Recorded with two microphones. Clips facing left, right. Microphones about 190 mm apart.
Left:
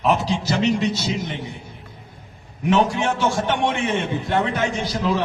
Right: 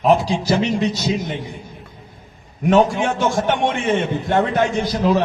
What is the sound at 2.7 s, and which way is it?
A man's voice, 50° right (ahead or behind).